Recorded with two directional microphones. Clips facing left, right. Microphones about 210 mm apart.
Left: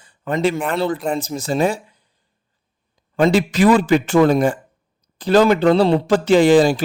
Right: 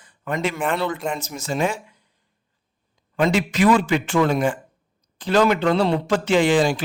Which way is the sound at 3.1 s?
35° left (ahead or behind).